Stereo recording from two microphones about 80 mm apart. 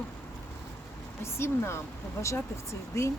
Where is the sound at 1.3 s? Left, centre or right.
Left.